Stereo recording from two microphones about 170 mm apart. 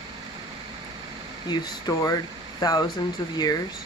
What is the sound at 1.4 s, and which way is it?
Speech, 25° left (ahead or behind).